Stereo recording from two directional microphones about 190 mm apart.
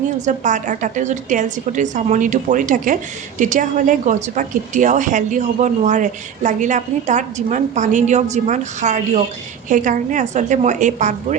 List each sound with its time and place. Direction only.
0.3 s a woman's voice: 40° right (ahead or behind)